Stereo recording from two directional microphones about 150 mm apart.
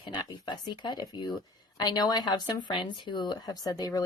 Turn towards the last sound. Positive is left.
turn(degrees=25)  # may be behind; listen again after turning